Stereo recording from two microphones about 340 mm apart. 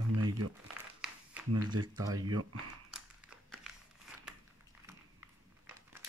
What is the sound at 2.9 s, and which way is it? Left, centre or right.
Crumpling, centre.